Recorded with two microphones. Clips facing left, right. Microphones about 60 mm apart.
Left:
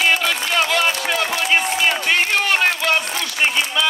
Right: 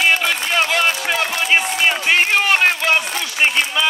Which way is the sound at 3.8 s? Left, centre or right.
Right.